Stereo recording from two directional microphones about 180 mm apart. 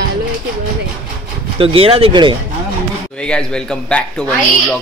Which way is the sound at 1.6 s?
30° right (ahead or behind).